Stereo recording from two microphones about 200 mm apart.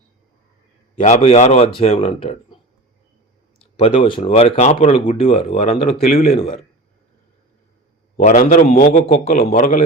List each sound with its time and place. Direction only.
0.9 s speech: 35° left (ahead or behind)
3.6 s a man's voice: 30° left (ahead or behind)
8.1 s speech: 40° left (ahead or behind)